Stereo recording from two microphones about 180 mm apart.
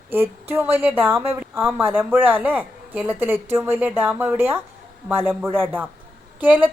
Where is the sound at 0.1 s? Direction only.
15° right (ahead or behind).